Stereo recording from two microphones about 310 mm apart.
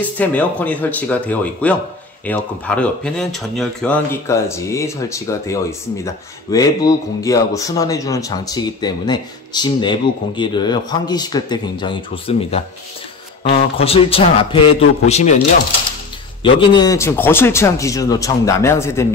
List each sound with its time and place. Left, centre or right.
0.2 s speech: centre; by 15.3 s left
16.4 s speech: centre